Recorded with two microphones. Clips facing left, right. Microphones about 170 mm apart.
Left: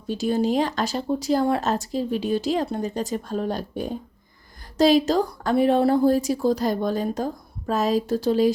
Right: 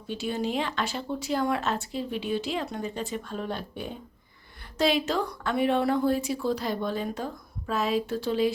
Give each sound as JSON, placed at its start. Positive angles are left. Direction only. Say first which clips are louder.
{"t": 0.1, "sound": "speech", "louder": "left 7 dB", "side_deg": 40}